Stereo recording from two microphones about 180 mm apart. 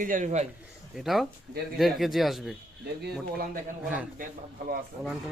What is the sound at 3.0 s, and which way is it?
Speech, 60° right (ahead or behind).